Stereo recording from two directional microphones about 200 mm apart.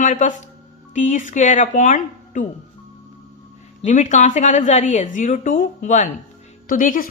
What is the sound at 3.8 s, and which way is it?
A woman's voice, 40° left (ahead or behind).